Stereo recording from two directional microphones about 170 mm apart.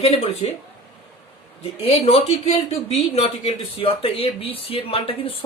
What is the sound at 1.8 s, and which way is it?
Speech, 35° left (ahead or behind).